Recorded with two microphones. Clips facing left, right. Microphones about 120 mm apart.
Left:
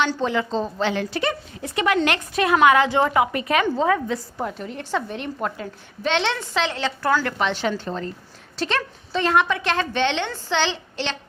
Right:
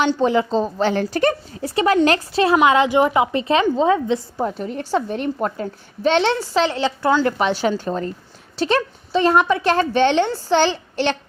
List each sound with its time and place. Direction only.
0.2 s a woman's voice: 40° right (ahead or behind)
4.4 s a woman's voice: 35° right (ahead or behind)
7.6 s a woman's voice: 40° right (ahead or behind)